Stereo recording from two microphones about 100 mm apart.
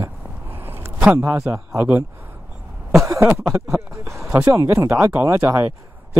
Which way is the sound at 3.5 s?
30° right (ahead or behind).